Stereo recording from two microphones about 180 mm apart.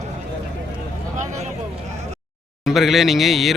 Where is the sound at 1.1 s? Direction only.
40° right (ahead or behind).